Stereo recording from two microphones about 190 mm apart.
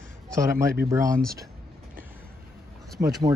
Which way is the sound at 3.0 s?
20° right (ahead or behind).